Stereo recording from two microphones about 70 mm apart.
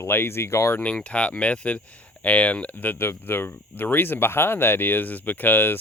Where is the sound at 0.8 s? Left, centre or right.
Centre.